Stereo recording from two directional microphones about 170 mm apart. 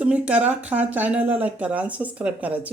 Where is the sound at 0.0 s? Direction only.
10° right (ahead or behind).